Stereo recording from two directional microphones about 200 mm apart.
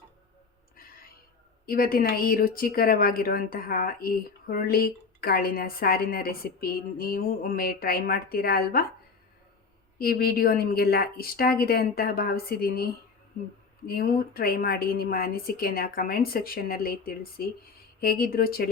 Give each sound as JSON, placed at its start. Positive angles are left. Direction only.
{"t": 1.6, "sound": "a woman's voice", "side_deg": 45}
{"t": 10.0, "sound": "a woman's voice", "side_deg": 50}